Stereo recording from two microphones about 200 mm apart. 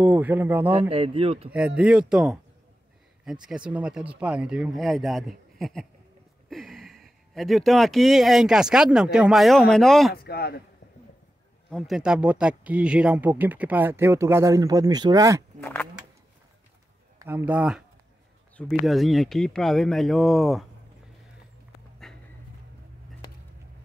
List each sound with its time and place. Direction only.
0.0 s speech: 10° right (ahead or behind)
0.7 s speech: 30° right (ahead or behind)
1.5 s speech: 5° right (ahead or behind)
10.1 s a man's voice: 50° left (ahead or behind)
11.7 s speech: 5° right (ahead or behind)
15.6 s speech: 10° left (ahead or behind)
17.2 s speech: 10° right (ahead or behind)
22.0 s a sound: centre (ahead or behind)